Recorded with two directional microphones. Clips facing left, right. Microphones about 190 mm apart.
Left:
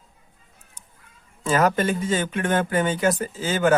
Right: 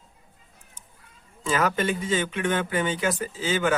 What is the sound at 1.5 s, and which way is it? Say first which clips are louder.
Speech: left 4 dB; 40° left (ahead or behind).